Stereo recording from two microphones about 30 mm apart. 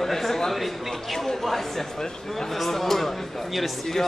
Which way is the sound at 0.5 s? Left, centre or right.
Centre.